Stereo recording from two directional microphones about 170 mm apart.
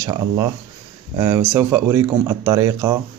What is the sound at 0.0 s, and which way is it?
Speech, 20° right (ahead or behind).